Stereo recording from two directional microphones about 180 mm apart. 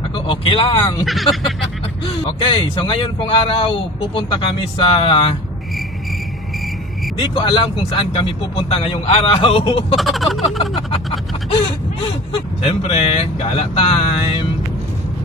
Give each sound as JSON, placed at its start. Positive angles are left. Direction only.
{"t": 0.3, "sound": "speech", "side_deg": 30}
{"t": 1.0, "sound": "a sound", "side_deg": 0}
{"t": 2.0, "sound": "speech", "side_deg": 30}
{"t": 7.2, "sound": "speech", "side_deg": 30}
{"t": 9.9, "sound": "a sound", "side_deg": 0}
{"t": 10.4, "sound": "speech", "side_deg": 30}
{"t": 12.6, "sound": "speech", "side_deg": 35}